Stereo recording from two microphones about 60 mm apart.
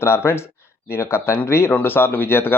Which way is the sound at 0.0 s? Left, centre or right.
Left.